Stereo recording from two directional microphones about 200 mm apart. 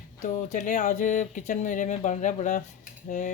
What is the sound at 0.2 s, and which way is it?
Speech, 40° left (ahead or behind).